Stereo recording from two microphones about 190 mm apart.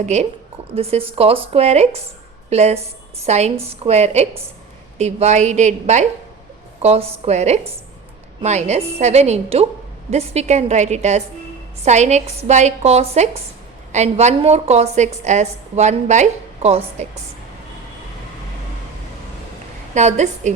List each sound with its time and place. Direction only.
0.0 s a woman's voice: 35° right (ahead or behind)
19.9 s a woman's voice: 40° right (ahead or behind)